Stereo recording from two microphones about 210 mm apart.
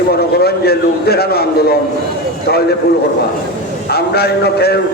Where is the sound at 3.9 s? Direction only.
50° left (ahead or behind).